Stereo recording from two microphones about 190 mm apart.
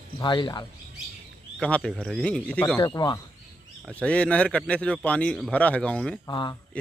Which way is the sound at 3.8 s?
5° left (ahead or behind).